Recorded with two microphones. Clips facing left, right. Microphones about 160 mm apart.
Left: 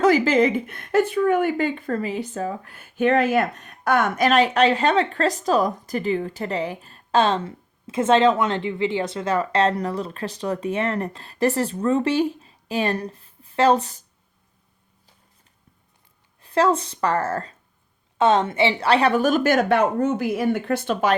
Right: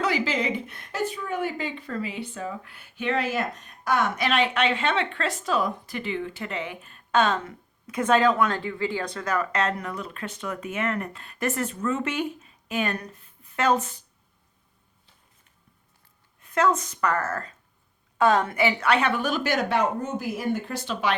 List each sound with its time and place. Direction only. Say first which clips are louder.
0.0 s speech: left 9 dB; 45° left (ahead or behind)
16.4 s a woman's voice: left 4 dB; 30° left (ahead or behind); by 21.2 s 45° left (ahead or behind)